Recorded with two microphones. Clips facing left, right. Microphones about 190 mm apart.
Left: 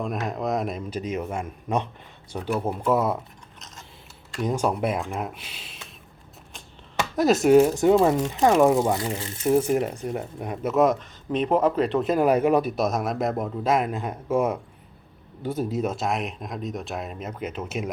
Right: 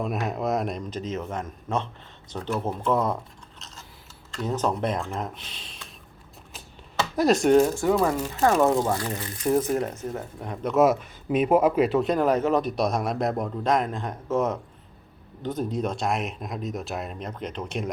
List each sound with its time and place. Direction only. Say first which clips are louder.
0.0 s speech: even; 5° right (ahead or behind)
4.4 s speech: left 2 dB; 10° left (ahead or behind)
7.2 s speech: left 2 dB; centre (ahead or behind)
9.1 s speech: left 1 dB; 25° left (ahead or behind)
9.5 s speech: left 2 dB; 10° left (ahead or behind)